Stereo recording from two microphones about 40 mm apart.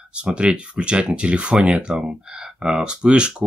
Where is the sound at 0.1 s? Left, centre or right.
Right.